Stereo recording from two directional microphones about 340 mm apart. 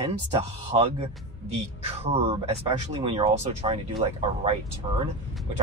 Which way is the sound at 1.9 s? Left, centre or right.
Centre.